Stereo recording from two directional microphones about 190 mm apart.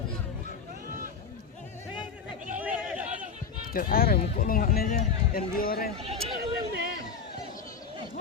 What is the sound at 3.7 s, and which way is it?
Speech, 50° left (ahead or behind).